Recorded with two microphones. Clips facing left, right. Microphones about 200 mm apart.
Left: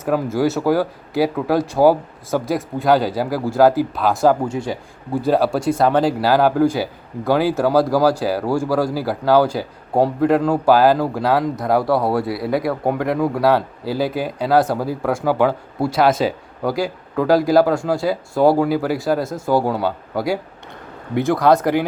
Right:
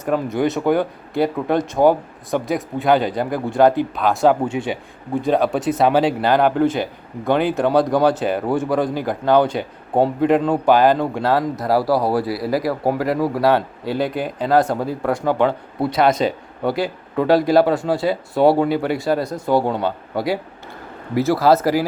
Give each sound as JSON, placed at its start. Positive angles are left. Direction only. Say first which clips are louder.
{"t": 0.0, "sound": "a man's voice", "louder": "left 1 dB", "side_deg": 5}